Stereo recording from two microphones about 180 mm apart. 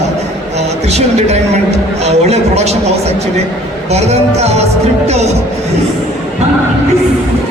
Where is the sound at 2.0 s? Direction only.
35° right (ahead or behind).